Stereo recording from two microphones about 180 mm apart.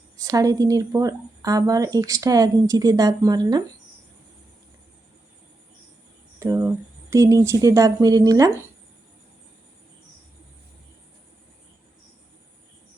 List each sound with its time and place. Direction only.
0.2 s speech: 20° right (ahead or behind)
6.4 s speech: 15° right (ahead or behind)